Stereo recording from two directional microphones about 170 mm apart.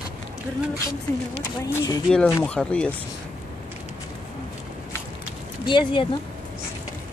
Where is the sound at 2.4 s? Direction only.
5° left (ahead or behind).